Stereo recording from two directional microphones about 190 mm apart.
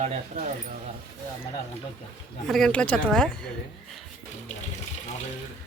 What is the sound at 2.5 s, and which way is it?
A woman's voice, centre (ahead or behind).